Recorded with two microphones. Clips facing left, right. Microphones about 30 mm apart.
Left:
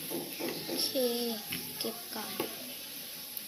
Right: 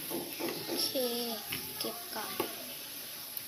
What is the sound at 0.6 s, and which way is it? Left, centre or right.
Speech, centre.